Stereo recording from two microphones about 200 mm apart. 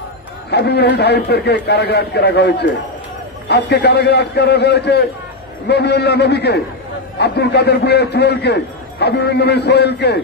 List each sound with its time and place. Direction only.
0.5 s a man's voice: 55° left (ahead or behind)